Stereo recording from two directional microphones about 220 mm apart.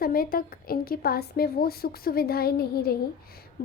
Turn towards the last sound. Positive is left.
turn(degrees=45)  # may be behind; listen again after turning